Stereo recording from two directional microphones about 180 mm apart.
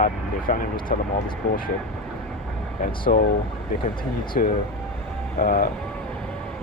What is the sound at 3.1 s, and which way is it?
Speech, 45° left (ahead or behind).